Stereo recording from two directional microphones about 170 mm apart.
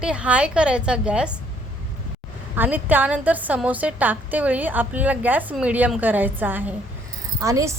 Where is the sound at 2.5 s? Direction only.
10° right (ahead or behind).